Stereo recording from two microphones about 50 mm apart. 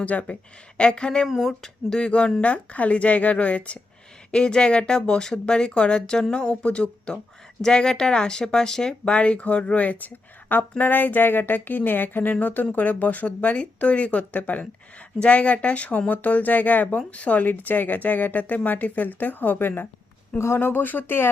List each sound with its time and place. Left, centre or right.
0.0 s speech: left
0.8 s speech: centre
1.3 s speech: centre
1.6 s speech: centre; by 21.2 s left